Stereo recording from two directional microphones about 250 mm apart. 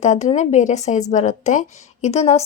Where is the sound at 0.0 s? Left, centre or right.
Left.